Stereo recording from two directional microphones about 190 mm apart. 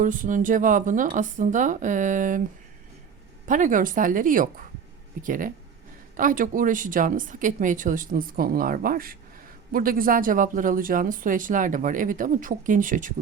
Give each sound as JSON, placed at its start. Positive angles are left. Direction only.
{"t": 0.0, "sound": "speech", "side_deg": -45}
{"t": 3.4, "sound": "speech", "side_deg": -45}